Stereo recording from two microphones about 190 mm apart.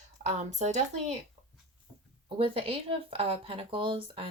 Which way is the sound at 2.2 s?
30° right (ahead or behind).